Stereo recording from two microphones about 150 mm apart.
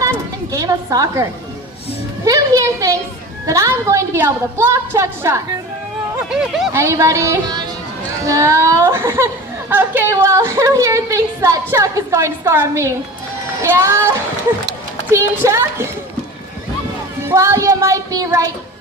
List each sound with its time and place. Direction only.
0.5 s speech: 20° right (ahead or behind)
2.2 s a woman's voice: 20° right (ahead or behind)
6.4 s speech: centre (ahead or behind)
6.7 s a woman's voice: 20° right (ahead or behind)
17.2 s speech: 20° right (ahead or behind)